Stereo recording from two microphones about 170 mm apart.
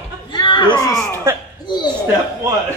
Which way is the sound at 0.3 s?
25° left (ahead or behind).